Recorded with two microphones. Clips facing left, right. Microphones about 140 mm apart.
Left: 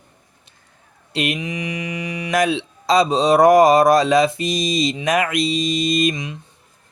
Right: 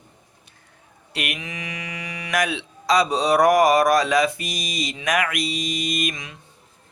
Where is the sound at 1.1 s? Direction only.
25° left (ahead or behind).